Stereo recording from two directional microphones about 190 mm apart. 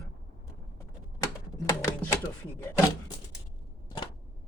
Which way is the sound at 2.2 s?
15° left (ahead or behind).